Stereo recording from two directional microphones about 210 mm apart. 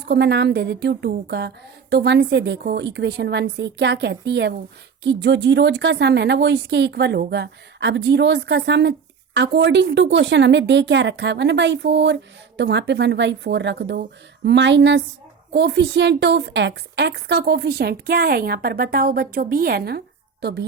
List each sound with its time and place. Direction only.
0.1 s a woman's voice: 50° right (ahead or behind)